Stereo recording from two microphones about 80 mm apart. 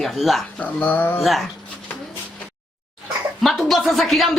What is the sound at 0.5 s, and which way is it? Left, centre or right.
Speech, left.